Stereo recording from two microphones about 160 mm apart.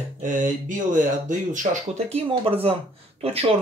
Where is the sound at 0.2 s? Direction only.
55° right (ahead or behind).